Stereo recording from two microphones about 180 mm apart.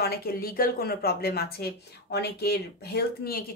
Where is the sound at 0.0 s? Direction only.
60° left (ahead or behind).